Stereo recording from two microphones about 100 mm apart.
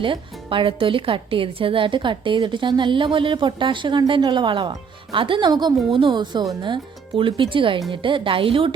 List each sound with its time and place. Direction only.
0.0 s speech: 60° right (ahead or behind)
5.5 s a woman's voice: 45° right (ahead or behind); by 8.7 s 65° right (ahead or behind)